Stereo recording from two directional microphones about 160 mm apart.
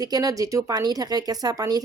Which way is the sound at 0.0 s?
25° right (ahead or behind).